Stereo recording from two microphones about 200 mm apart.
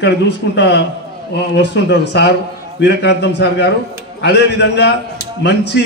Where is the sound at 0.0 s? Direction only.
60° left (ahead or behind).